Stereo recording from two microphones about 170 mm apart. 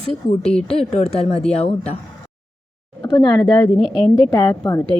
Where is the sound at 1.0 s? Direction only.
35° left (ahead or behind).